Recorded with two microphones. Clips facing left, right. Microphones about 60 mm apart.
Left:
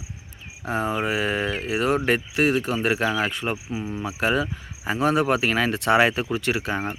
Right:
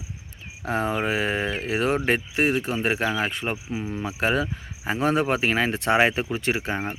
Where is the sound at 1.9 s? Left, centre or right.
Right.